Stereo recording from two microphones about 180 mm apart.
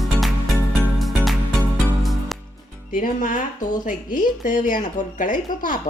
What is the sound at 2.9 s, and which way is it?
Speech, 50° left (ahead or behind).